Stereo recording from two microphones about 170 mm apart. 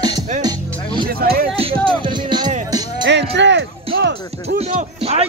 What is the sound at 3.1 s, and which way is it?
Music, 90° right.